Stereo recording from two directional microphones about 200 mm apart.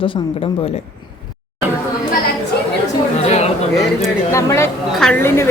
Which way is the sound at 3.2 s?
30° left (ahead or behind).